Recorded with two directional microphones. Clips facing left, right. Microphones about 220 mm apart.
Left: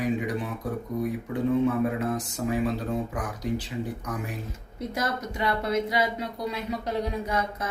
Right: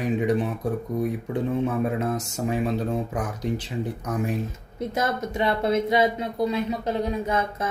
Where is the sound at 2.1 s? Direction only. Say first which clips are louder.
Right 1 dB; 25° right (ahead or behind).